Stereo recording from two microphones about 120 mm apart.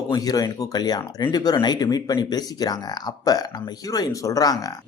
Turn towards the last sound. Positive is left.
turn(degrees=30)  # may be behind; listen again after turning